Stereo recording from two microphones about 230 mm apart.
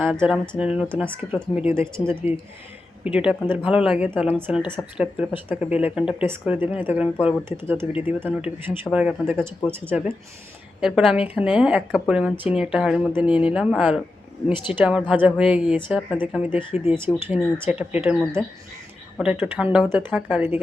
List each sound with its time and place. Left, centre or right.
0.0 s speech: centre
2.0 s speech: left
3.0 s speech: centre